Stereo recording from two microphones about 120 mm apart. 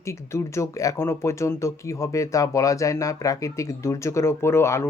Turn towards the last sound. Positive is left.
turn(degrees=20)  # may be behind; listen again after turning